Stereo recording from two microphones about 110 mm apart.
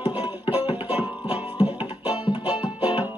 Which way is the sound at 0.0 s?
15° right (ahead or behind).